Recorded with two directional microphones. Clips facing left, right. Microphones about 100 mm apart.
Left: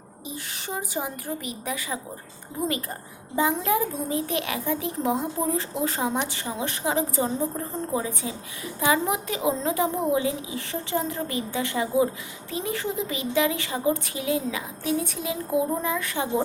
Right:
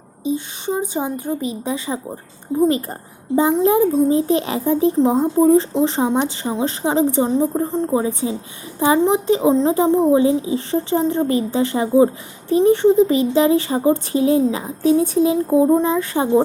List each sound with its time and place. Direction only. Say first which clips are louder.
0.3 s a woman's voice: right 10 dB; 25° right (ahead or behind)